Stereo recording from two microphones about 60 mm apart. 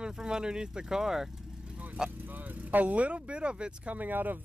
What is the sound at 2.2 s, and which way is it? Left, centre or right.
Speech, right.